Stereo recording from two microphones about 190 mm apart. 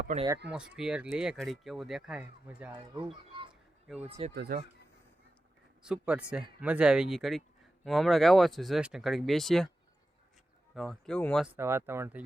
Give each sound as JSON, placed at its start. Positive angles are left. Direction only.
{"t": 0.5, "sound": "speech", "side_deg": -5}
{"t": 4.0, "sound": "speech", "side_deg": -30}
{"t": 4.4, "sound": "speech", "side_deg": -55}
{"t": 5.8, "sound": "speech", "side_deg": -5}
{"t": 10.8, "sound": "speech", "side_deg": 0}
{"t": 11.5, "sound": "speech", "side_deg": -10}